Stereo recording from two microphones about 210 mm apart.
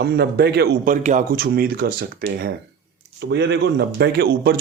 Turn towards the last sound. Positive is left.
turn(degrees=-50)  # may be behind; listen again after turning